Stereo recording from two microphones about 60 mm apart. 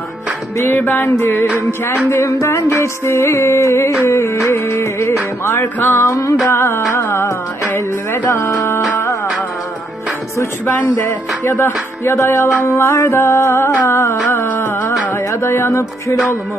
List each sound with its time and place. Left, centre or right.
0.9 s music: left
5.8 s music: left
6.0 s music: left
6.5 s music: left
11.0 s music: left
12.6 s music: left